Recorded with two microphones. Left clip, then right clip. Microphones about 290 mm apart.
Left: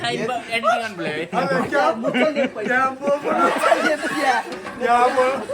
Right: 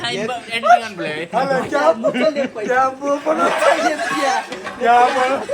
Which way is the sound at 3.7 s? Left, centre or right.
Centre.